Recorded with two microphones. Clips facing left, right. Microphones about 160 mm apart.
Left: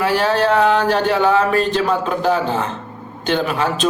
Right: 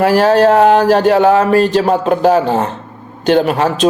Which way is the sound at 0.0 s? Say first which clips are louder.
Right 7 dB; 40° right (ahead or behind).